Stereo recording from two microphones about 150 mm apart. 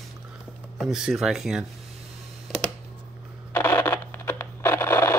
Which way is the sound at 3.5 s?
15° left (ahead or behind).